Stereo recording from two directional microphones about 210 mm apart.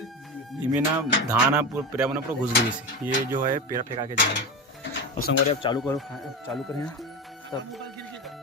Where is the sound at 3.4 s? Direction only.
40° right (ahead or behind).